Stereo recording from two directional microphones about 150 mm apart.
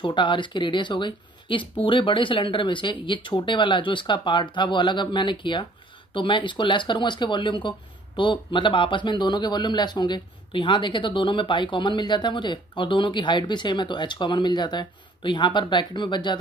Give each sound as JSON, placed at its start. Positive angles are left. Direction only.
{"t": 0.0, "sound": "speech", "side_deg": 30}